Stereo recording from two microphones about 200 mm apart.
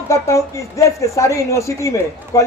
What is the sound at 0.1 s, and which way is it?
Speech, 15° left (ahead or behind).